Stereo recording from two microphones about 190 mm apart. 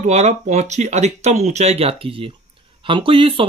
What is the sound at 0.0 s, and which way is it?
Speech, 40° right (ahead or behind).